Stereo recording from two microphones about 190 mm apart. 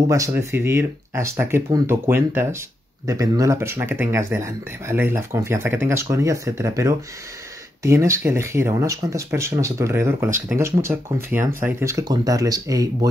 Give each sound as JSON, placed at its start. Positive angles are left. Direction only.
{"t": 0.1, "sound": "speech", "side_deg": -15}